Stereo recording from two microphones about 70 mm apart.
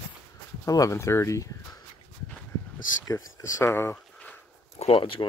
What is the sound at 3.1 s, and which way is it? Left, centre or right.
Speech, left.